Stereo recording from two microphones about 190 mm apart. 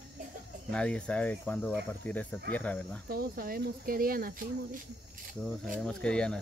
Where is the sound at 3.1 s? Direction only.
50° right (ahead or behind).